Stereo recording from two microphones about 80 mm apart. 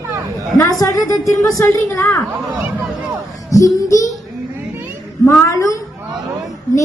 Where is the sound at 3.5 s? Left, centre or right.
Left.